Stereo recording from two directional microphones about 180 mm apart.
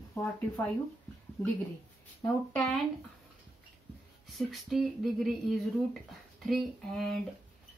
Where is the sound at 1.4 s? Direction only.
15° left (ahead or behind).